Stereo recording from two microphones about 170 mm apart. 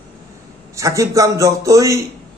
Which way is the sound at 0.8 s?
20° right (ahead or behind).